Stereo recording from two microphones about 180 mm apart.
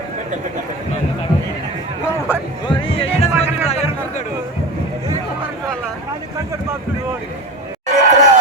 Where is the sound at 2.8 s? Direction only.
30° left (ahead or behind).